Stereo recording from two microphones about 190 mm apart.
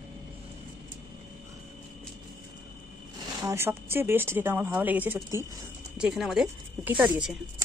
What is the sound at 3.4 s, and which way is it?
A woman's voice, 15° right (ahead or behind).